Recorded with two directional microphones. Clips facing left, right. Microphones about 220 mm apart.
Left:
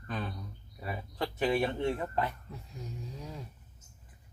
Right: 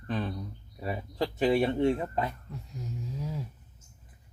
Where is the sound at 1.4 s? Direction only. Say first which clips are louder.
Right 5 dB; 20° right (ahead or behind).